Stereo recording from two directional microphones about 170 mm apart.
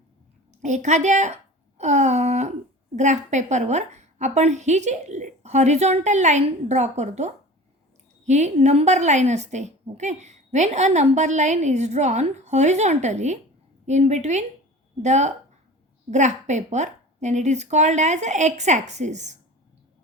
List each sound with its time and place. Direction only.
0.6 s a woman's voice: 45° right (ahead or behind)